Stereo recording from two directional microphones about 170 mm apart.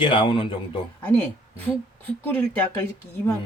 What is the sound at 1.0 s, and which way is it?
A woman's voice, 10° left (ahead or behind).